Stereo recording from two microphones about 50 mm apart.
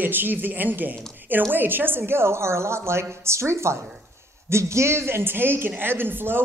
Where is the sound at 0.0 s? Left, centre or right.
Right.